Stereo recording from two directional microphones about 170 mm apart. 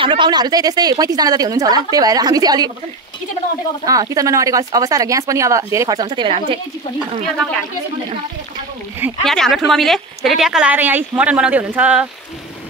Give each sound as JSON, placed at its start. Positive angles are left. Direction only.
{"t": 0.0, "sound": "speech", "side_deg": -30}
{"t": 3.8, "sound": "speech", "side_deg": -20}
{"t": 9.2, "sound": "a woman's voice", "side_deg": 0}